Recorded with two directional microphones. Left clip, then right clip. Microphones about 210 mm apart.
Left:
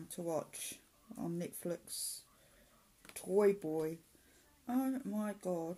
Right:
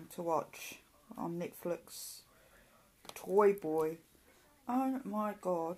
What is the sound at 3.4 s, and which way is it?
Speech, 40° left (ahead or behind).